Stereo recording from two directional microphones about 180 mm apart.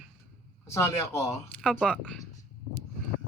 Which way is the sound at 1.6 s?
Centre (ahead or behind).